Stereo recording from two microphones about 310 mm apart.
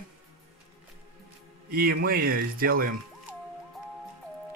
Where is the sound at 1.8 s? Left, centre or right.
Right.